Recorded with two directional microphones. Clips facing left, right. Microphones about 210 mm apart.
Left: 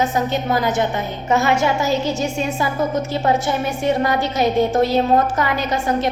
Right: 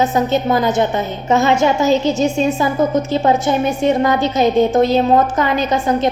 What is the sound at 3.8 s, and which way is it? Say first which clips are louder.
A woman's voice: right 3 dB; 20° right (ahead or behind).